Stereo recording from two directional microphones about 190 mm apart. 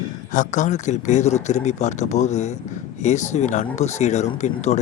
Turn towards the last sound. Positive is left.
turn(degrees=35)  # may be behind; listen again after turning